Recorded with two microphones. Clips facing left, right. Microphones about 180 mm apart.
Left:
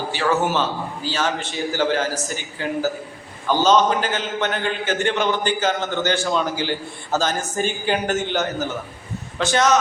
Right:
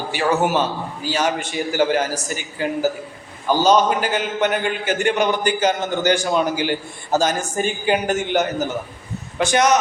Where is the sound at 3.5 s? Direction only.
10° right (ahead or behind).